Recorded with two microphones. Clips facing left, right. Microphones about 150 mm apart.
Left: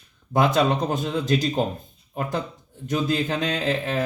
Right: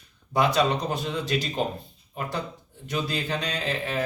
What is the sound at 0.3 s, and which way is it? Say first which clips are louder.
Speech: left 3 dB; 50° left (ahead or behind).